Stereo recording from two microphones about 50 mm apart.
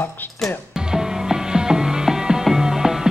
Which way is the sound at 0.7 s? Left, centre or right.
Centre.